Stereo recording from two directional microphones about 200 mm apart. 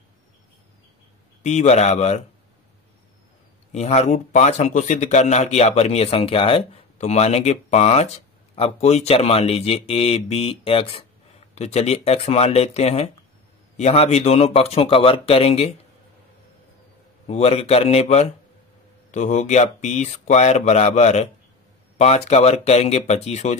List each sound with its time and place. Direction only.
1.4 s speech: 35° left (ahead or behind)
3.7 s speech: 35° left (ahead or behind)
17.3 s speech: 30° left (ahead or behind)